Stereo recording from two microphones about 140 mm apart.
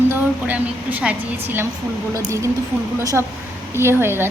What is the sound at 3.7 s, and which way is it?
Speech, 15° right (ahead or behind).